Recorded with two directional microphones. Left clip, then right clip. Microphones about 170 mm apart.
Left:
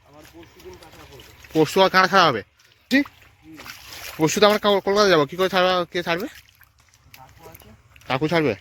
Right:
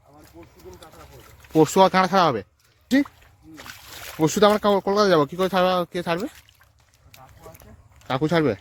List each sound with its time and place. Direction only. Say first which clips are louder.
1.5 s speech: right 1 dB; 35° right (ahead or behind)
1.9 s speech: left 3 dB; 15° right (ahead or behind)
3.5 s splash: left 2 dB; 5° right (ahead or behind)
4.2 s speech: left 1 dB; 20° right (ahead or behind)
8.0 s speech: left 1 dB; 25° right (ahead or behind)